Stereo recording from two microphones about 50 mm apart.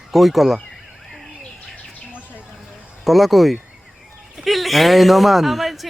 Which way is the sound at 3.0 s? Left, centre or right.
Centre.